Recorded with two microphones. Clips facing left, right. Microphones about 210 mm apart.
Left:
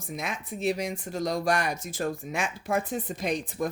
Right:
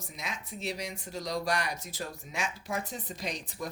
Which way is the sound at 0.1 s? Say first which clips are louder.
Left 8 dB; 50° left (ahead or behind).